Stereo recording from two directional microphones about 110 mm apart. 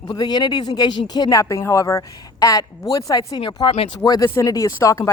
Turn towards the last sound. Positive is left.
turn(degrees=30)  # may be behind; listen again after turning